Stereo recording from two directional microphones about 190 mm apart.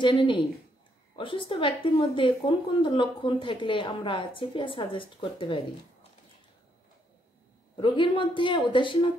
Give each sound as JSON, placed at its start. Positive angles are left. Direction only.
{"t": 0.0, "sound": "a woman's voice", "side_deg": 25}
{"t": 7.7, "sound": "a woman's voice", "side_deg": 25}